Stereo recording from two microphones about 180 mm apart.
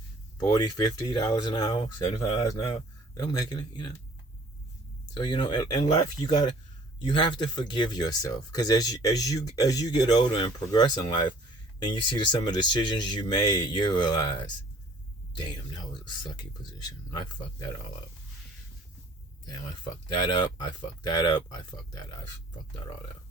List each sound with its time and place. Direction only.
0.3 s speech: 20° left (ahead or behind)
3.2 s speech: 20° left (ahead or behind)
5.1 s speech: 25° left (ahead or behind)
19.5 s speech: 25° left (ahead or behind)